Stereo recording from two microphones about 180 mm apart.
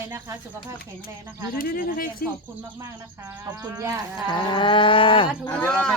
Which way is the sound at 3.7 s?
15° right (ahead or behind).